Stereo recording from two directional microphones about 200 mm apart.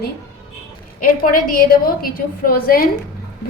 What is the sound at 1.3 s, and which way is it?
A woman's voice, 45° left (ahead or behind).